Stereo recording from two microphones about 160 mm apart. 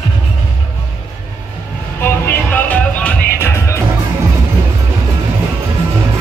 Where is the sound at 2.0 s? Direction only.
15° left (ahead or behind).